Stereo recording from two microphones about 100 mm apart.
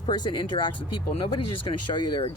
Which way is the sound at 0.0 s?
50° left (ahead or behind).